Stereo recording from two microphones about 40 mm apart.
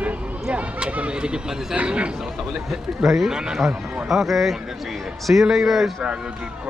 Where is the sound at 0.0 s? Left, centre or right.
Right.